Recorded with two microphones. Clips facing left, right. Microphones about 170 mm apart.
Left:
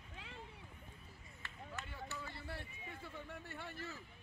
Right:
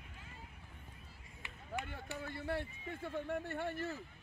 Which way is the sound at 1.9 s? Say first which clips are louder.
Right 4 dB; 60° right (ahead or behind).